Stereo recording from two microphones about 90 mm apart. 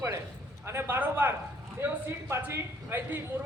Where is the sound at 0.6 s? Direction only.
25° right (ahead or behind).